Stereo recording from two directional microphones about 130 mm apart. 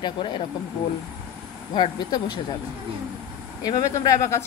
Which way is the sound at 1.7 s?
30° left (ahead or behind).